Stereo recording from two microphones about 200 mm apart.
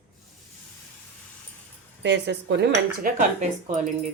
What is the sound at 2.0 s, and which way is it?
Speech, 60° right (ahead or behind).